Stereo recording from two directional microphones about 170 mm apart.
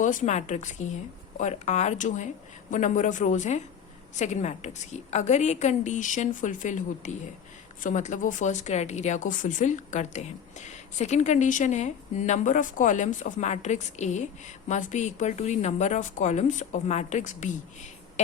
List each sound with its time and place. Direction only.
0.0 s a woman's voice: 45° left (ahead or behind)